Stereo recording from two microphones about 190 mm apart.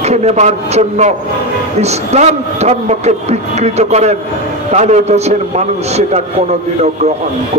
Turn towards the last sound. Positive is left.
turn(degrees=-35)  # may be behind; listen again after turning